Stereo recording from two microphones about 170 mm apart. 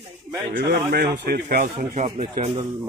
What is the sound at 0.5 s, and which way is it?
A man's voice, 65° right (ahead or behind).